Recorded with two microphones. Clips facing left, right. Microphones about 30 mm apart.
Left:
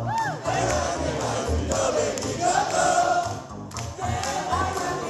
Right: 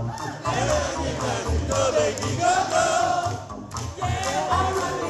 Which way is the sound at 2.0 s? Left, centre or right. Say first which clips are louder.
Right 2 dB; right.